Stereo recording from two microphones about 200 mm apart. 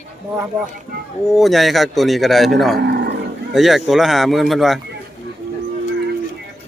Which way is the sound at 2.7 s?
55° right (ahead or behind).